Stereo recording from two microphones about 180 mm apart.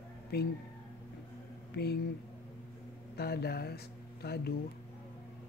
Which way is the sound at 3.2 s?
60° left (ahead or behind).